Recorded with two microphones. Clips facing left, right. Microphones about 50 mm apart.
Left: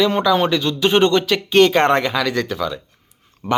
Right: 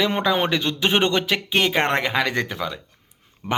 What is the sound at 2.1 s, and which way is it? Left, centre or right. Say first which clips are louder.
Speech: left 2 dB; right.